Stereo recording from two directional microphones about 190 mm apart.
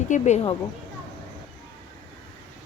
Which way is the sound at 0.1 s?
35° left (ahead or behind).